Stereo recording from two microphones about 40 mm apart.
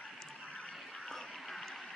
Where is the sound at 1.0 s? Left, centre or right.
Centre.